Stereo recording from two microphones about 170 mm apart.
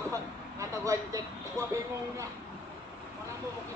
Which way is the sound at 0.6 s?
20° right (ahead or behind).